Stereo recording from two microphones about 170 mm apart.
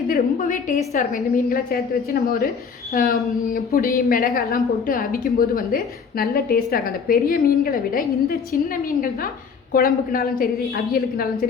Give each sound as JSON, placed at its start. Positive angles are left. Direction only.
{"t": 0.1, "sound": "a woman's voice", "side_deg": 50}